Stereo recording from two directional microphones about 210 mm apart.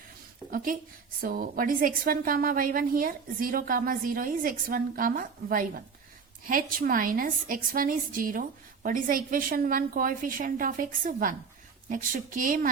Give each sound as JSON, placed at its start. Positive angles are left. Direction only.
{"t": 0.5, "sound": "a woman's voice", "side_deg": -40}